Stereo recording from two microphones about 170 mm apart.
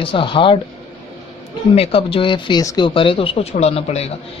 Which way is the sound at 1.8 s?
35° left (ahead or behind).